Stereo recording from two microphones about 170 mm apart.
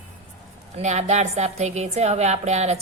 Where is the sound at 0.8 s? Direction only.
45° right (ahead or behind).